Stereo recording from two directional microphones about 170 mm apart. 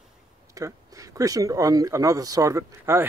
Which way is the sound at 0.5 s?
20° right (ahead or behind).